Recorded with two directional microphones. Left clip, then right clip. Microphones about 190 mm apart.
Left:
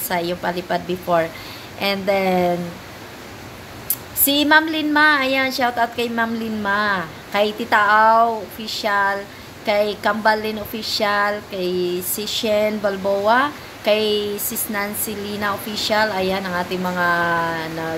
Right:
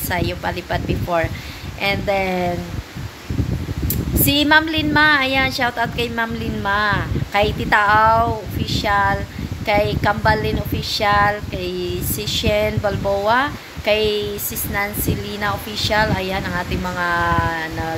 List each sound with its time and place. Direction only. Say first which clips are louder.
0.1 s a woman's voice: left 1 dB; 5° left (ahead or behind)
4.2 s a woman's voice: even; centre (ahead or behind)